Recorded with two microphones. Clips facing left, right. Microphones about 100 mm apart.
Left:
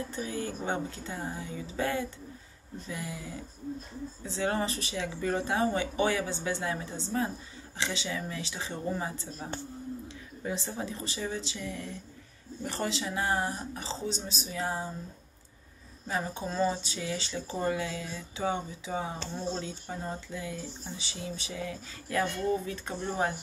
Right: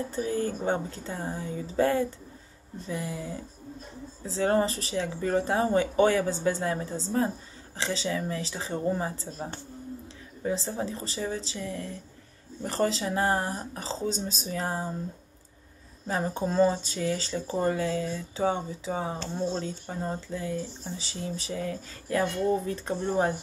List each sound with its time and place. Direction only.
0.1 s speech: 35° right (ahead or behind)
10.4 s speech: 30° right (ahead or behind)
16.1 s speech: 35° right (ahead or behind)